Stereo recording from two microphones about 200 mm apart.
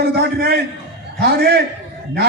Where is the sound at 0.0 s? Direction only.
50° right (ahead or behind).